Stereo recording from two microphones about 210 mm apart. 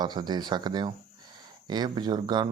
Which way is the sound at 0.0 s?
20° right (ahead or behind).